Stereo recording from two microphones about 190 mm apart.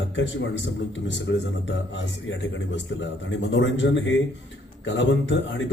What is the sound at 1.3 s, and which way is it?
Speech, 90° left.